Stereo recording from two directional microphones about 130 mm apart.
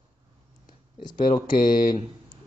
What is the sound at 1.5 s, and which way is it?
Speech, 90° left.